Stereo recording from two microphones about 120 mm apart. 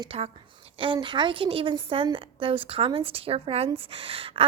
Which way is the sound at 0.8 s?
45° right (ahead or behind).